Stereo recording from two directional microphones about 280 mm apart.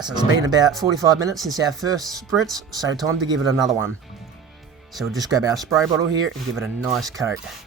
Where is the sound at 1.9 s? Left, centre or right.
Centre.